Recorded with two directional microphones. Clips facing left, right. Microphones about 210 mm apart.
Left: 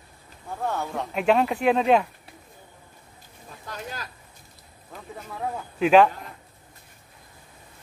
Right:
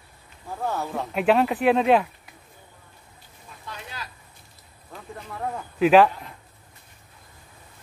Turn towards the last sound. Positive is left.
turn(degrees=-5)  # may be behind; listen again after turning